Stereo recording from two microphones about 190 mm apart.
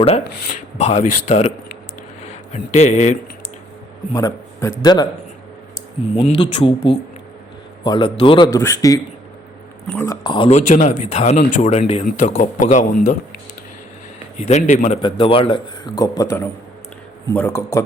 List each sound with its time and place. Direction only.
0.8 s speech: 35° left (ahead or behind)
4.1 s a man's voice: 20° left (ahead or behind)
6.1 s a man's voice: 25° left (ahead or behind)
8.5 s a man's voice: 15° left (ahead or behind)
9.8 s speech: 5° left (ahead or behind)
10.1 s a man's voice: 25° left (ahead or behind)
10.7 s speech: 40° left (ahead or behind)
12.0 s speech: 40° left (ahead or behind)
14.3 s speech: 35° left (ahead or behind)
15.0 s a man's voice: 25° left (ahead or behind)